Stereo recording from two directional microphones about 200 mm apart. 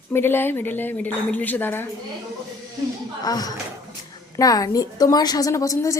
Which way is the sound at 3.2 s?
20° left (ahead or behind).